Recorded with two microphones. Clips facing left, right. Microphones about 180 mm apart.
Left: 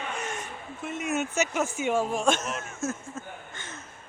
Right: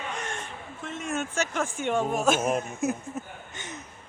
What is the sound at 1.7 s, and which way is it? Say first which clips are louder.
Speech: right 2 dB; 5° left (ahead or behind).